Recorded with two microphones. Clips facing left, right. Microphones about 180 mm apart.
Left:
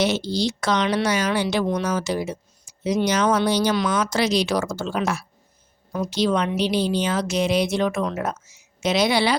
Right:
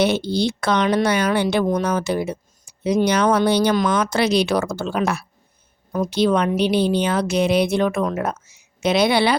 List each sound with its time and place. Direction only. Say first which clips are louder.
0.0 s a woman's voice: right 3 dB; 55° right (ahead or behind)